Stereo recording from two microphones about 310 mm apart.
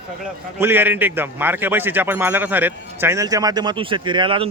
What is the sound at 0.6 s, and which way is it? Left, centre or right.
A man's voice, centre.